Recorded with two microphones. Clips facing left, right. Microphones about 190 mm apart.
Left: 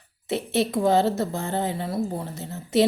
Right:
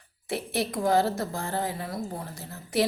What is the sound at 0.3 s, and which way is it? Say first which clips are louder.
A woman's voice: left 5 dB; 25° left (ahead or behind).